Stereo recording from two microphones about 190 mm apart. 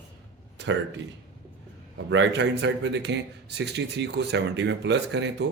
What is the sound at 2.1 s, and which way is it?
A man's voice, 70° right (ahead or behind).